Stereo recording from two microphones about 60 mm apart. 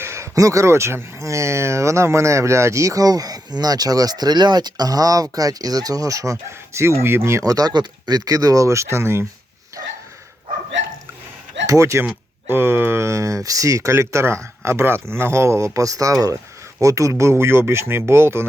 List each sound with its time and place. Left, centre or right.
0.0 s a sound: right
0.3 s speech: right
7.4 s speech: right
11.6 s speech: right
12.0 s speech: right
14.0 s speech: right